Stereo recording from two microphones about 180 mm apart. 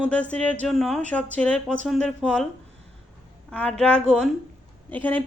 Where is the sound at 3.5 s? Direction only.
5° left (ahead or behind).